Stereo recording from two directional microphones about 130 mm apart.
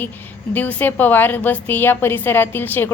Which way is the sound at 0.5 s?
15° left (ahead or behind).